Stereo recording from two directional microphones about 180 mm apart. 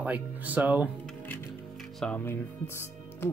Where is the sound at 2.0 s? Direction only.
10° left (ahead or behind).